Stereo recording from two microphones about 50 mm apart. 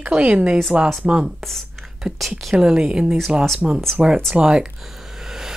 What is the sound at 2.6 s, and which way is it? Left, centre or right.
Speech, centre.